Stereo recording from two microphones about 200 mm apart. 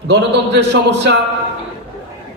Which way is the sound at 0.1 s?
60° right (ahead or behind).